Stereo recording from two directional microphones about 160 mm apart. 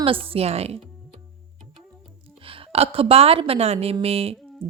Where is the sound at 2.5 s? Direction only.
35° right (ahead or behind).